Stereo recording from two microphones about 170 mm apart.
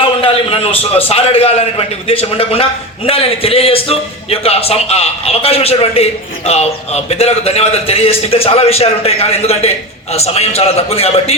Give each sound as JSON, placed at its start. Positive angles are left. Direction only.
{"t": 0.0, "sound": "a man's voice", "side_deg": 35}